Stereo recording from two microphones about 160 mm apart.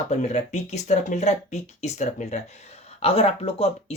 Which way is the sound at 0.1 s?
45° left (ahead or behind).